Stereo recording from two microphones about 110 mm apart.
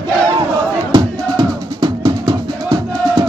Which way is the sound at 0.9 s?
40° right (ahead or behind).